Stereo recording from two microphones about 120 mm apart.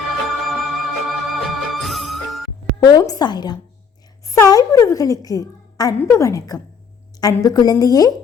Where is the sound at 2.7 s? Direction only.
35° left (ahead or behind).